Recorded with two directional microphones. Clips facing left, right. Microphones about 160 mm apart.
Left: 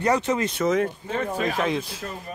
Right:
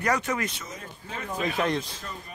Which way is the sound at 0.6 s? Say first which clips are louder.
Left 19 dB; 75° left (ahead or behind).